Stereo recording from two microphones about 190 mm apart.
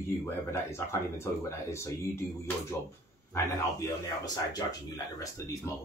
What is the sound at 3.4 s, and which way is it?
Speech, 20° left (ahead or behind).